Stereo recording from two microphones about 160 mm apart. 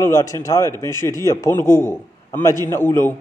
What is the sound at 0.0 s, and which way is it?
A man's voice, 20° left (ahead or behind).